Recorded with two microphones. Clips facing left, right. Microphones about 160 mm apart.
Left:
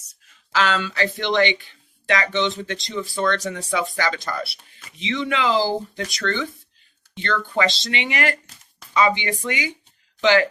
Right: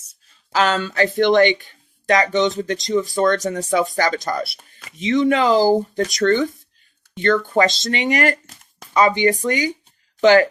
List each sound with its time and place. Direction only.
0.1 s speech: 40° right (ahead or behind)